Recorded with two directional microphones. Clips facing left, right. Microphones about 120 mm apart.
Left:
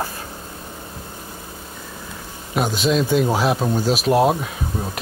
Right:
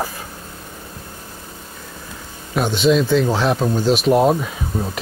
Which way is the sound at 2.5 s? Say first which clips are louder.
Right 3 dB; 5° left (ahead or behind).